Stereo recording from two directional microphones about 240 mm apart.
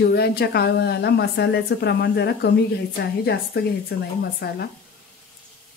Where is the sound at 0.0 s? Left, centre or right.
Left.